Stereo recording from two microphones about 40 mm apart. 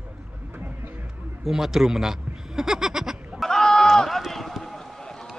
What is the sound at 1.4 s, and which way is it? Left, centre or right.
Speech, centre.